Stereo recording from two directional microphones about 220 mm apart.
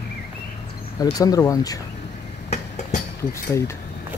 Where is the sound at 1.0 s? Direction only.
15° left (ahead or behind).